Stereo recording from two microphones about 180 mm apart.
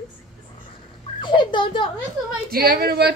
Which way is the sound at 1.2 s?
25° left (ahead or behind).